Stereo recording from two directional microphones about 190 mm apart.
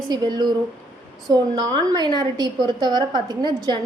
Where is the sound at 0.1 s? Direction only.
20° right (ahead or behind).